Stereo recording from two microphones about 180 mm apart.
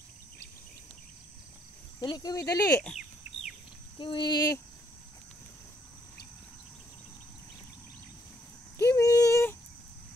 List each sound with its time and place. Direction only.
2.0 s speech: 25° left (ahead or behind)
4.0 s speech: 25° left (ahead or behind)
8.7 s a sound: 15° left (ahead or behind)